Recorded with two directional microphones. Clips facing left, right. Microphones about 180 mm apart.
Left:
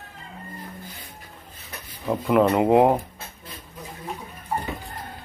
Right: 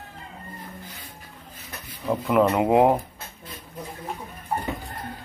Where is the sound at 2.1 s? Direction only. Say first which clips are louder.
Left 1 dB; centre (ahead or behind).